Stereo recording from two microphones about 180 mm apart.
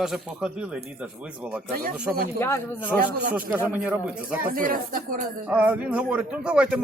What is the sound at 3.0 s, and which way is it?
Speech, 50° right (ahead or behind).